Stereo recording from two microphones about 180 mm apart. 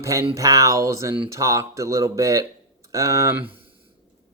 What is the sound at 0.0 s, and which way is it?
Speech, 20° right (ahead or behind).